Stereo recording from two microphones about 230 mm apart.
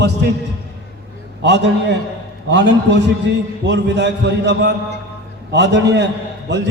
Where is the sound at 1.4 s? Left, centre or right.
Right.